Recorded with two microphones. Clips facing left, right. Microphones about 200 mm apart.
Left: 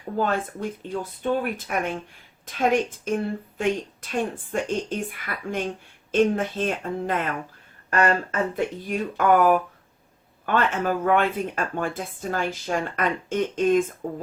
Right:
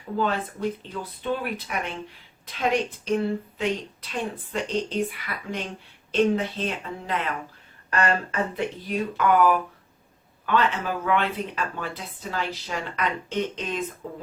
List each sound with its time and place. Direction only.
0.8 s speech: 50° left (ahead or behind)